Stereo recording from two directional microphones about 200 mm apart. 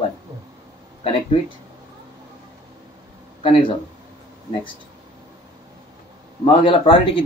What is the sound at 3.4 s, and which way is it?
Speech, 30° left (ahead or behind).